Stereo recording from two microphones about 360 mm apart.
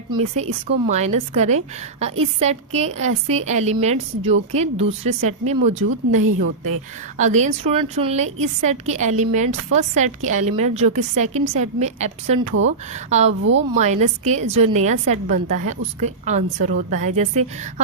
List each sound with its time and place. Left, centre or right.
0.1 s a woman's voice: centre
7.2 s a woman's voice: centre
10.8 s speech: right
11.2 s a woman's voice: centre
12.5 s speech: right
13.1 s a woman's voice: centre